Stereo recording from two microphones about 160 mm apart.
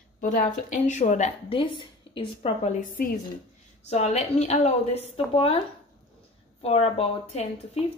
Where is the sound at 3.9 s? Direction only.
45° left (ahead or behind).